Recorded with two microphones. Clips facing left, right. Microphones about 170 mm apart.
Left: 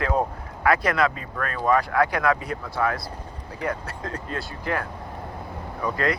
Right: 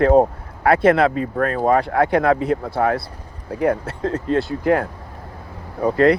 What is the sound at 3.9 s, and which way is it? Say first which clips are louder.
Speech: right 11 dB; 25° right (ahead or behind).